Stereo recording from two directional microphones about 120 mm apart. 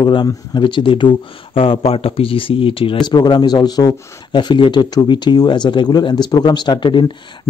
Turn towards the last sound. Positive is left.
turn(degrees=40)  # may be behind; listen again after turning